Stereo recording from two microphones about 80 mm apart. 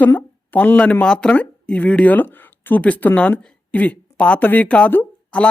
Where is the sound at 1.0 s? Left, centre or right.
Centre.